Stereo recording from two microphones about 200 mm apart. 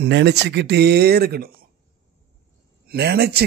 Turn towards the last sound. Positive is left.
turn(degrees=-55)  # may be behind; listen again after turning